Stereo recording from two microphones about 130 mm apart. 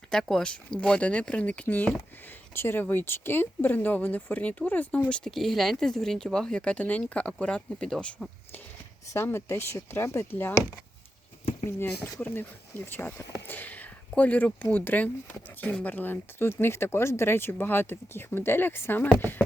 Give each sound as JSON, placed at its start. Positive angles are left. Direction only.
{"t": 0.1, "sound": "speech", "side_deg": 5}
{"t": 9.0, "sound": "speech", "side_deg": 20}
{"t": 11.6, "sound": "speech", "side_deg": 20}